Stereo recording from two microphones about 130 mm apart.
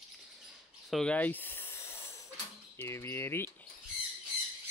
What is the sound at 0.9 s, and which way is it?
Speech, 10° left (ahead or behind).